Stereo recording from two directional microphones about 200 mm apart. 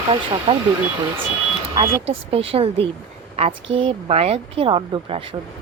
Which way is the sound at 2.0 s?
30° right (ahead or behind).